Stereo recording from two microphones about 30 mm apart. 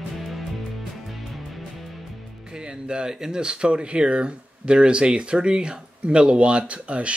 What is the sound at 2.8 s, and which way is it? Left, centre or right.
Speech, right.